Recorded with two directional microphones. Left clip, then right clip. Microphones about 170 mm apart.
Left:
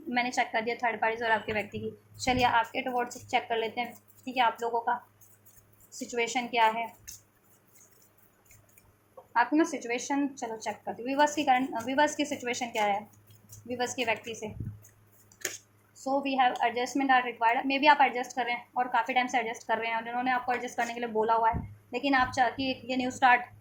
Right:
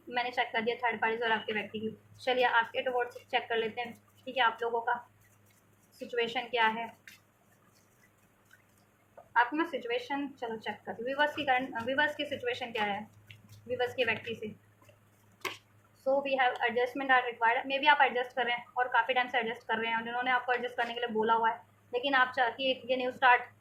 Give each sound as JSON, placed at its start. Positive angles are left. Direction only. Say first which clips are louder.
{"t": 0.1, "sound": "a woman's voice", "louder": "left 3 dB", "side_deg": 45}
{"t": 6.1, "sound": "a woman's voice", "louder": "left 2 dB", "side_deg": 35}
{"t": 9.3, "sound": "a woman's voice", "louder": "left 3 dB", "side_deg": 40}
{"t": 16.0, "sound": "a woman's voice", "louder": "left 2 dB", "side_deg": 45}